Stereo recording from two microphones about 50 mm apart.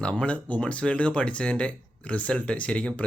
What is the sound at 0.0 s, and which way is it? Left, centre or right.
Speech, left.